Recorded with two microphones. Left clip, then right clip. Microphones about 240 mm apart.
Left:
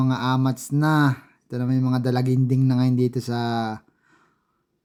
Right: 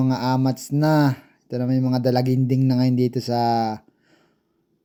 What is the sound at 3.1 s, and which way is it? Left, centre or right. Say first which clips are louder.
Speech: right 6 dB; centre.